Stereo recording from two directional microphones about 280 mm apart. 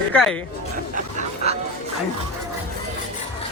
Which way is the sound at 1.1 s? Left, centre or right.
Right.